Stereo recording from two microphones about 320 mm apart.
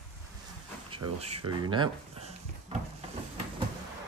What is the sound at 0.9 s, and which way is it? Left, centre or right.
Speech, centre.